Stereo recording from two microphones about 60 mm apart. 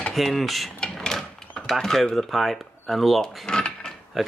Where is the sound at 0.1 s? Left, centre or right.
Centre.